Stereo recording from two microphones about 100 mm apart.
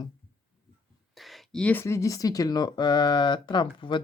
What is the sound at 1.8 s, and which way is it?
Speech, 30° left (ahead or behind).